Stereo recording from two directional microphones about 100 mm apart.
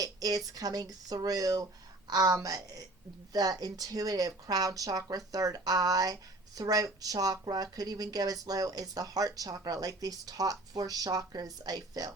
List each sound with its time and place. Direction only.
0.0 s speech: 40° right (ahead or behind)